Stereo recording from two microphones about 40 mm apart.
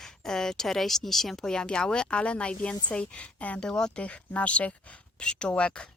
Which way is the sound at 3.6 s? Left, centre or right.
Centre.